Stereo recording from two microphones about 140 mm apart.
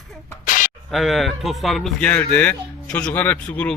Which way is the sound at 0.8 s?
Centre (ahead or behind).